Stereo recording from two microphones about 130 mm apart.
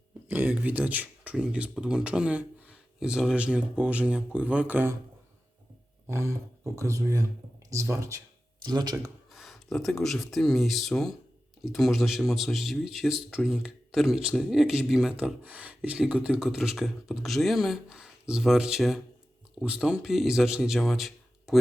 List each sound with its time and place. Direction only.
0.3 s speech: 15° right (ahead or behind)
6.1 s speech: 20° right (ahead or behind)
9.3 s speech: centre (ahead or behind)